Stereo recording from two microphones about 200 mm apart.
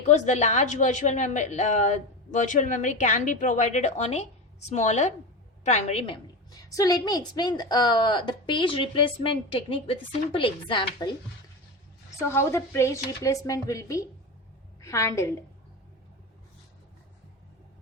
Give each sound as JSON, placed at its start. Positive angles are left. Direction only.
{"t": 0.0, "sound": "a woman's voice", "side_deg": 35}
{"t": 6.5, "sound": "a woman's voice", "side_deg": 15}
{"t": 12.2, "sound": "a woman's voice", "side_deg": 15}